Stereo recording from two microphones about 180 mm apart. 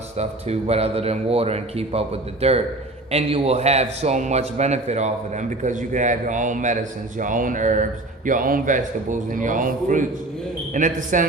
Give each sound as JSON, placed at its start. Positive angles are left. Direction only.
{"t": 0.2, "sound": "a man's voice", "side_deg": -35}